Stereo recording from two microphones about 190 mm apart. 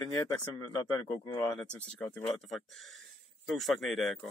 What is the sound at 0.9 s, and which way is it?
Speech, 20° left (ahead or behind).